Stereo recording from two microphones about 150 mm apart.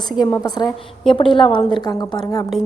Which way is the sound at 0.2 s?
25° left (ahead or behind).